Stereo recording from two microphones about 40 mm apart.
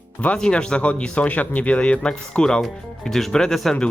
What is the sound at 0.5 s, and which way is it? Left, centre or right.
Speech, left.